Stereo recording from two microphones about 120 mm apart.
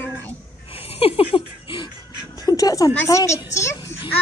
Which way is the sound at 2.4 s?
30° left (ahead or behind).